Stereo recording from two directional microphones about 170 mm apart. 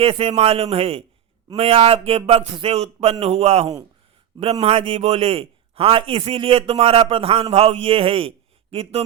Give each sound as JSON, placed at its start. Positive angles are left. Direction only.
{"t": 0.0, "sound": "a man's voice", "side_deg": -35}